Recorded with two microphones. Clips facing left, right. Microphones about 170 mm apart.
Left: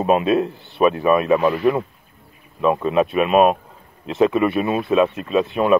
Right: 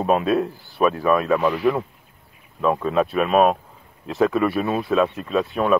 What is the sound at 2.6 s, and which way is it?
Speech, 10° left (ahead or behind).